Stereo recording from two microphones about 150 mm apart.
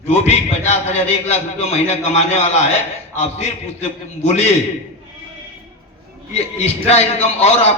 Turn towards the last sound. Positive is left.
turn(degrees=45)  # may be behind; listen again after turning